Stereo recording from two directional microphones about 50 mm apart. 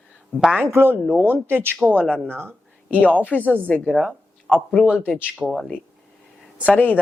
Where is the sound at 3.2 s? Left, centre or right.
Left.